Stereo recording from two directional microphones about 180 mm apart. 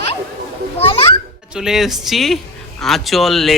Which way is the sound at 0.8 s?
30° left (ahead or behind).